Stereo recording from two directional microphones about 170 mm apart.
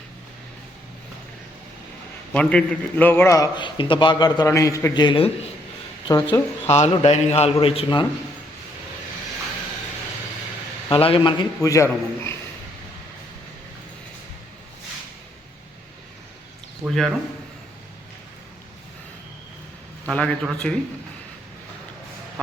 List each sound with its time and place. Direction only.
2.3 s a man's voice: 5° left (ahead or behind); by 6.4 s 20° left (ahead or behind)
6.7 s a man's voice: 40° left (ahead or behind)
10.8 s a man's voice: 35° left (ahead or behind); by 12.4 s 15° left (ahead or behind)
16.8 s a man's voice: centre (ahead or behind)
20.1 s a man's voice: 5° left (ahead or behind)